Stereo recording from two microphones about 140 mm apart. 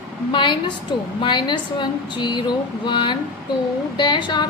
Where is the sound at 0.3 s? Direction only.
35° left (ahead or behind).